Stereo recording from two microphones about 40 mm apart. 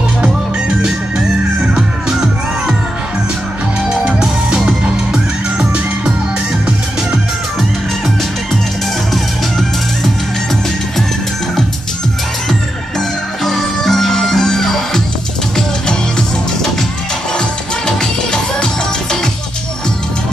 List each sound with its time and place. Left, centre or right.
1.8 s music: centre
4.8 s music: right
9.1 s music: centre
13.4 s music: centre
17.4 s music: centre